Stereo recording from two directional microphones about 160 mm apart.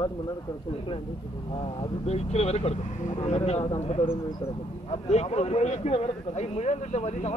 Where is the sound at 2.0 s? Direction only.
40° left (ahead or behind).